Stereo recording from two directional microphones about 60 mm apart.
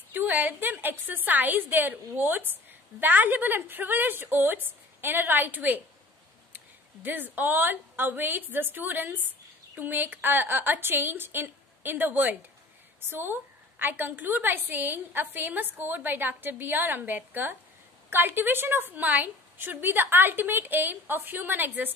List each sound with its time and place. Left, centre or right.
0.1 s a woman's voice: right